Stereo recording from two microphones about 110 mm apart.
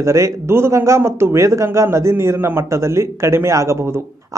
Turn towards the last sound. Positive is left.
turn(degrees=-25)  # may be behind; listen again after turning